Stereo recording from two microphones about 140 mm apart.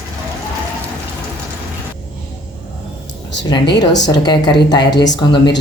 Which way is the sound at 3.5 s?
30° left (ahead or behind).